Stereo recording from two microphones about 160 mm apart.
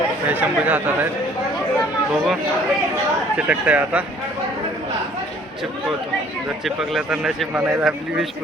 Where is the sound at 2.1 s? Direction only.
Centre (ahead or behind).